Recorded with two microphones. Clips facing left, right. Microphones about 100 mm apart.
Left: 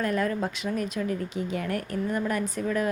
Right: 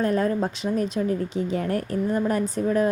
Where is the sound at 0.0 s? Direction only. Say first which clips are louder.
Right 4 dB; 30° right (ahead or behind).